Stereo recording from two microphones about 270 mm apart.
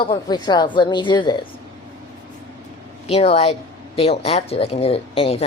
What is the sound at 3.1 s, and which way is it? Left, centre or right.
A woman's voice, left.